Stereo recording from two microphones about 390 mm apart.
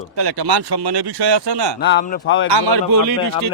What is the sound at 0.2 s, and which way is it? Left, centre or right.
Speech, right.